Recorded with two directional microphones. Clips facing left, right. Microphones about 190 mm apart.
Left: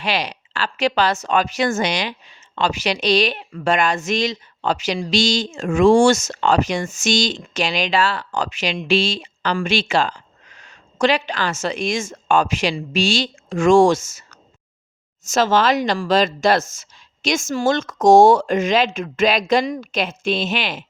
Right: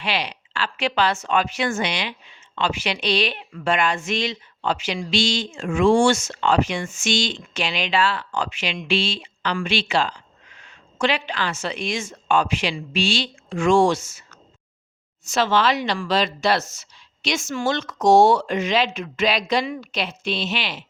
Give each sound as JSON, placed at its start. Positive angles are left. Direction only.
{"t": 0.0, "sound": "a woman's voice", "side_deg": 45}